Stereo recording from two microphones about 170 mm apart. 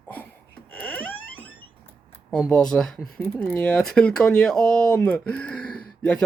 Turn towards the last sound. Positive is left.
turn(degrees=5)  # may be behind; listen again after turning